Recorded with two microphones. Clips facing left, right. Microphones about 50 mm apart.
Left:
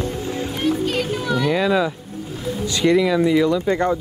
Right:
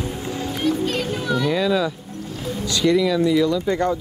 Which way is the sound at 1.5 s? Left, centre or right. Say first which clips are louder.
Left 2 dB; centre.